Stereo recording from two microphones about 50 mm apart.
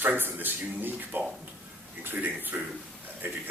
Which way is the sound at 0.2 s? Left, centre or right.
Right.